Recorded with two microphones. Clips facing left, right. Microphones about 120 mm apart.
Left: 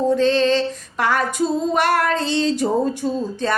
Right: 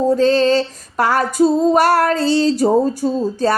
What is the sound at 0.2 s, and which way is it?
Female singing, 40° right (ahead or behind).